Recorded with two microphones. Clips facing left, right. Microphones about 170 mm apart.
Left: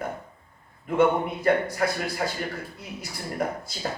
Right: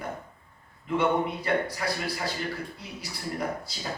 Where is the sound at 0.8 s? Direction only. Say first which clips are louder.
Left 4 dB; 50° left (ahead or behind).